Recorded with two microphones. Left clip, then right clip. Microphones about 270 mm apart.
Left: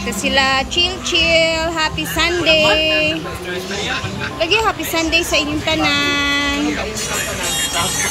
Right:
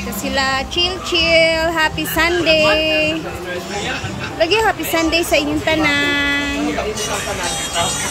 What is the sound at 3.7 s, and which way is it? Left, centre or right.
Speech, right.